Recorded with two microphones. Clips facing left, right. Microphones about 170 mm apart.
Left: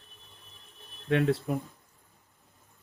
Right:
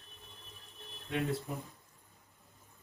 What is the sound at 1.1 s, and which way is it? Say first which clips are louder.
Speech: left 9 dB; 70° left (ahead or behind).